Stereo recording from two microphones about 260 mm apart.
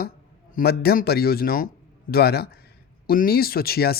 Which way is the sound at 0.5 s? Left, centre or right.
Left.